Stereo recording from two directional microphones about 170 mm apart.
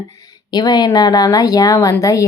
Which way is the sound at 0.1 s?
20° left (ahead or behind).